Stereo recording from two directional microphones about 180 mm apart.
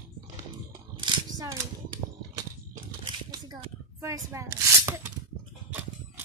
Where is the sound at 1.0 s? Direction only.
20° right (ahead or behind).